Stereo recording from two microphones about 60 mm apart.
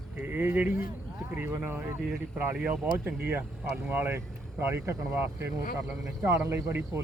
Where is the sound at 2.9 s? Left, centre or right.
Right.